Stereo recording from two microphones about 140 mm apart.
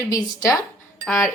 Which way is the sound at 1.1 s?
Centre (ahead or behind).